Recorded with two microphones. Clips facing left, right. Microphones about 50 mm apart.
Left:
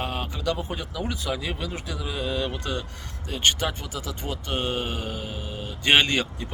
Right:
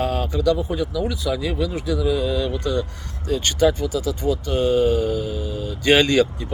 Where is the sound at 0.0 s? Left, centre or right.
Left.